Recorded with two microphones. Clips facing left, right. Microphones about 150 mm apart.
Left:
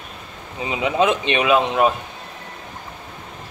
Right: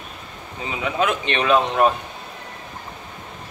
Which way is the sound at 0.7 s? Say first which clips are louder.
Left 4 dB; 20° left (ahead or behind).